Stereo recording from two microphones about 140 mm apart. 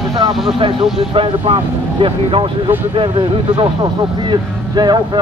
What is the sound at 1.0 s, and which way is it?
A man's voice, 40° right (ahead or behind).